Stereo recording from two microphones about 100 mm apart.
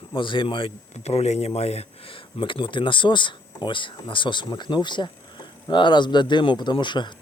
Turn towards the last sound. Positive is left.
turn(degrees=50)  # may be behind; listen again after turning